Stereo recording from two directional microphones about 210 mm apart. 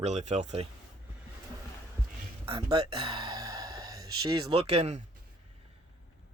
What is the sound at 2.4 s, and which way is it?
Speech, 25° right (ahead or behind).